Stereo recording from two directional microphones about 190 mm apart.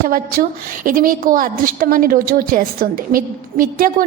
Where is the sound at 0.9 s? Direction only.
45° right (ahead or behind).